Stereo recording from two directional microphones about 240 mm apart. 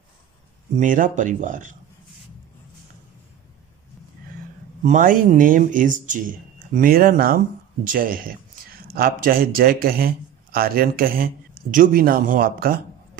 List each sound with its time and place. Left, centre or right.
0.7 s speech: right
4.8 s speech: right